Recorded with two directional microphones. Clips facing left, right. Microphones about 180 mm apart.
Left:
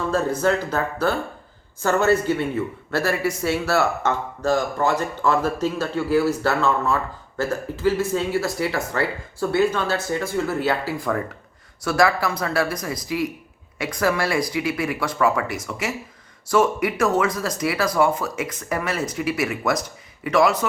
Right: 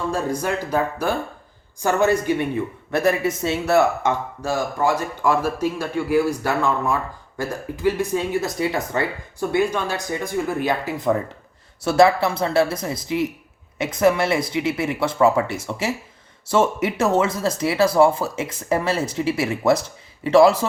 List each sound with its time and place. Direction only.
0.1 s speech: 15° right (ahead or behind); by 20.7 s 30° right (ahead or behind)